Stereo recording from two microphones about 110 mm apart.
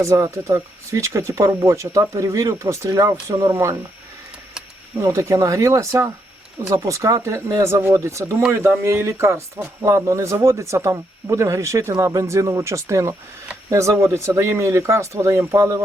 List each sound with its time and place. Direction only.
0.0 s speech: 25° right (ahead or behind)
4.9 s speech: 25° right (ahead or behind)
8.4 s speech: 15° right (ahead or behind)